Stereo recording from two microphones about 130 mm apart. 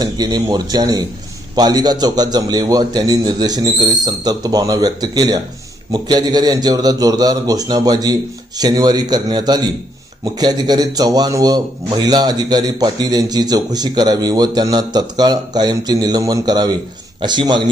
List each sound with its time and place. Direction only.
0.0 s a man's voice: 30° right (ahead or behind)